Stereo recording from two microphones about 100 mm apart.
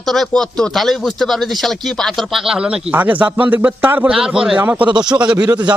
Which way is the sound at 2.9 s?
15° right (ahead or behind).